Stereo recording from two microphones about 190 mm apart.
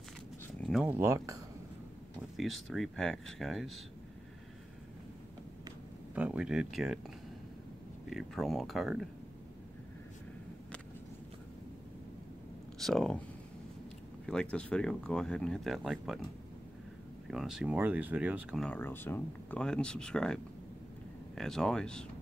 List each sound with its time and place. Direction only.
0.6 s speech: centre (ahead or behind); by 1.4 s 15° right (ahead or behind)
2.3 s speech: centre (ahead or behind)
6.1 s speech: 5° right (ahead or behind)
8.1 s speech: centre (ahead or behind)
12.7 s speech: centre (ahead or behind)
14.2 s speech: 5° left (ahead or behind)
17.3 s speech: 5° right (ahead or behind)
18.6 s speech: 10° left (ahead or behind)
21.4 s speech: centre (ahead or behind)